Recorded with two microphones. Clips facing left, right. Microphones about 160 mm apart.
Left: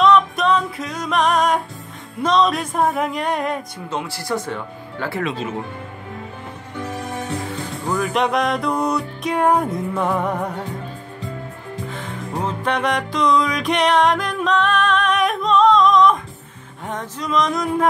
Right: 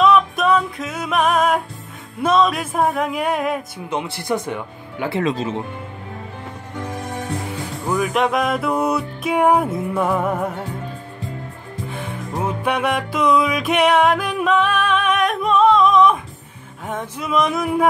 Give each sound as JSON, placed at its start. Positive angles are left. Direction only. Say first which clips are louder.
{"t": 0.0, "sound": "music", "louder": "even", "side_deg": -5}
{"t": 3.9, "sound": "speech", "louder": "right 2 dB", "side_deg": -20}
{"t": 5.2, "sound": "speech", "louder": "right 4 dB", "side_deg": -35}
{"t": 7.9, "sound": "music", "louder": "right 1 dB", "side_deg": -5}
{"t": 11.9, "sound": "music", "louder": "right 2 dB", "side_deg": -10}
{"t": 16.8, "sound": "a sound", "louder": "right 1 dB", "side_deg": -5}